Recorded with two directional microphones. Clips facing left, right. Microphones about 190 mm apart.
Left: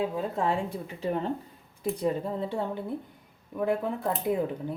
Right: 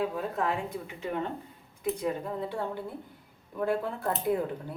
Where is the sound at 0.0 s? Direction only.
25° left (ahead or behind).